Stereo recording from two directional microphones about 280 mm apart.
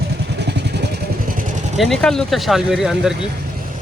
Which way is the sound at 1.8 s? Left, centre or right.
Centre.